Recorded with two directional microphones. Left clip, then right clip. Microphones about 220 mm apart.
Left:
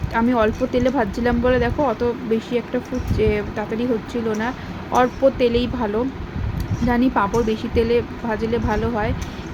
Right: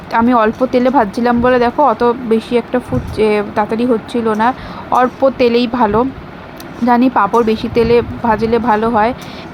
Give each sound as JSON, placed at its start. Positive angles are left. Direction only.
{"t": 0.1, "sound": "speech", "side_deg": -20}